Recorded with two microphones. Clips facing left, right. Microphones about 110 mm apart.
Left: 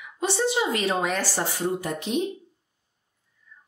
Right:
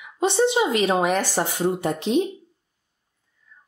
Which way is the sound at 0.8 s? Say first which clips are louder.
Right 5 dB; 20° right (ahead or behind).